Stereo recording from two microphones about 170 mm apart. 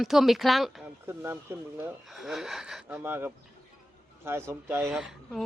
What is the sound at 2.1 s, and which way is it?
Speech, centre (ahead or behind).